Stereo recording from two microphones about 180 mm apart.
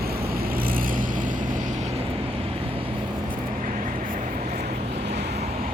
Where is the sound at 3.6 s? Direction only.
45° right (ahead or behind).